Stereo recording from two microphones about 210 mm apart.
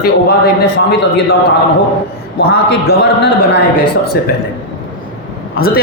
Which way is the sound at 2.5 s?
50° left (ahead or behind).